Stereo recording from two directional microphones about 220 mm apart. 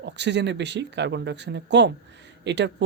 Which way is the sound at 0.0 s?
50° right (ahead or behind).